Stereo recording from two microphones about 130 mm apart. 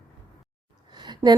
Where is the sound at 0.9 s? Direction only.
35° right (ahead or behind).